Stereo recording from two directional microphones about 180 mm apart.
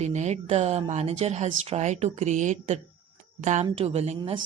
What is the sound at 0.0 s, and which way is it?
A woman's voice, 40° right (ahead or behind).